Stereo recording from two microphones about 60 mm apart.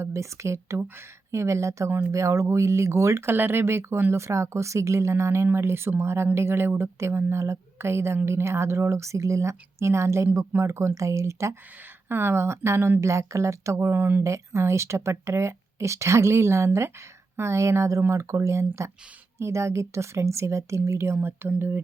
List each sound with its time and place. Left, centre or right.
0.0 s speech: right
3.3 s speech: right
12.0 s speech: right
13.9 s speech: right
14.3 s speech: right